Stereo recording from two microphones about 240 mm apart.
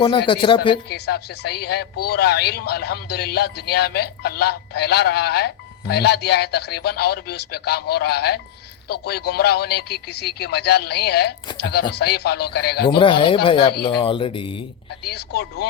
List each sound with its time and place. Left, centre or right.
0.3 s speech: left
0.9 s speech: left
13.0 s speech: left
15.0 s speech: left